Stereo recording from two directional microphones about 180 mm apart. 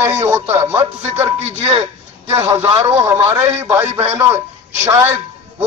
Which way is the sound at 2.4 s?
15° right (ahead or behind).